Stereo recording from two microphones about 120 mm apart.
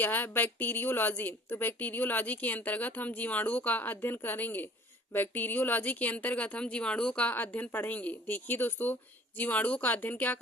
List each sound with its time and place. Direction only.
0.0 s a woman's voice: 15° left (ahead or behind)